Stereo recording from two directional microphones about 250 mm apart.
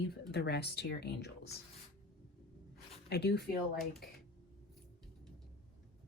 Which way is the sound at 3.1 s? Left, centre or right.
Left.